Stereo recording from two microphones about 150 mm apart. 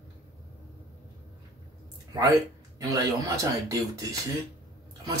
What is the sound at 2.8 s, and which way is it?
Speech, 25° right (ahead or behind).